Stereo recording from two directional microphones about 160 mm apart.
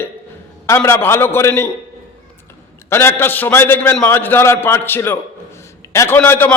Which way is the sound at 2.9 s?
15° left (ahead or behind).